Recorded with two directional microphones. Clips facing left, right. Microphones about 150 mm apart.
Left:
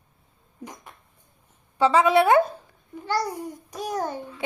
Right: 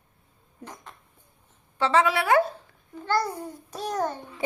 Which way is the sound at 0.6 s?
10° left (ahead or behind).